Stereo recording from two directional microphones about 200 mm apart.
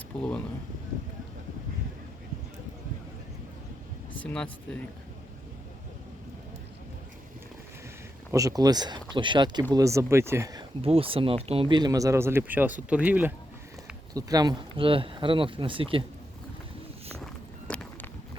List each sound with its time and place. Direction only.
0.1 s speech: 5° left (ahead or behind)
4.2 s speech: 5° left (ahead or behind)
8.3 s speech: 15° right (ahead or behind)
14.1 s speech: 20° right (ahead or behind)
17.7 s a sound: 5° left (ahead or behind)